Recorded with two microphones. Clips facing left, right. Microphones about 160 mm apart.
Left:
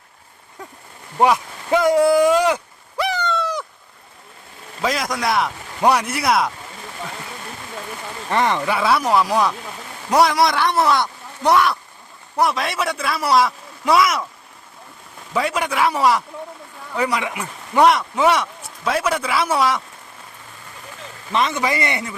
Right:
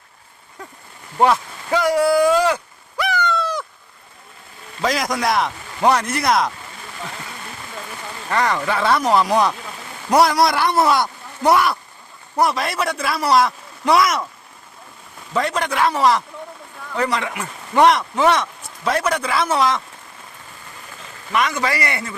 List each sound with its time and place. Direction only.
1.2 s speech: 15° left (ahead or behind)
1.8 s speech: 25° left (ahead or behind)
3.0 s bird: 25° left (ahead or behind)
4.8 s a man's voice: centre (ahead or behind)
5.8 s a man's voice: 10° left (ahead or behind)
8.3 s a man's voice: 20° left (ahead or behind); by 14.3 s centre (ahead or behind)
15.3 s a man's voice: 5° left (ahead or behind)
21.3 s speech: 25° left (ahead or behind)